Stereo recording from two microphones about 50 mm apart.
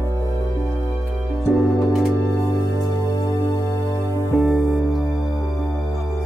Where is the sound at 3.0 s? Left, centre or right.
Left.